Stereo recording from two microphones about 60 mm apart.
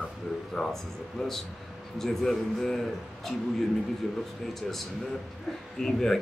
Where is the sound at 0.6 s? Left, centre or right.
Centre.